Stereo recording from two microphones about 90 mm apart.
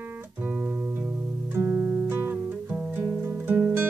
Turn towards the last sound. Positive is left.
turn(degrees=-20)  # may be behind; listen again after turning